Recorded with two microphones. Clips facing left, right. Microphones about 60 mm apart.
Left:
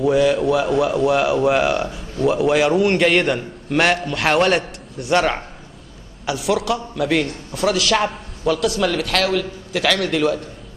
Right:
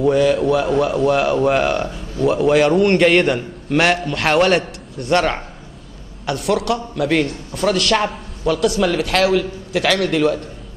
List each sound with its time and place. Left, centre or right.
0.0 s a man's voice: centre